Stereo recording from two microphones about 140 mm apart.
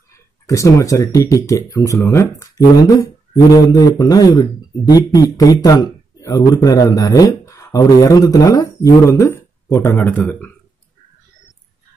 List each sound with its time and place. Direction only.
0.5 s speech: 25° left (ahead or behind)